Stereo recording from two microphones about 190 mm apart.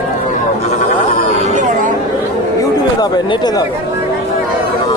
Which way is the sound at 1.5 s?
40° right (ahead or behind).